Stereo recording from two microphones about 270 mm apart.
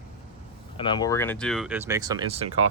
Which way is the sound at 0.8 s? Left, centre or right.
Centre.